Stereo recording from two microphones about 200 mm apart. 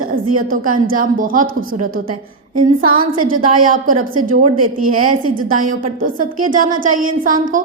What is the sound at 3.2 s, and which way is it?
A woman's voice, 45° right (ahead or behind).